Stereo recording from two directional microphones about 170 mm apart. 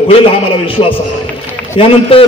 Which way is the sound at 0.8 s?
35° left (ahead or behind).